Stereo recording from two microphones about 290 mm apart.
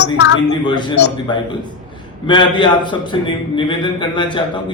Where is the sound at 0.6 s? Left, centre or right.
Centre.